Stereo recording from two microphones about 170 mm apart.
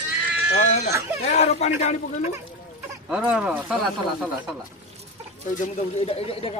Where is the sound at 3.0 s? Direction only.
5° right (ahead or behind).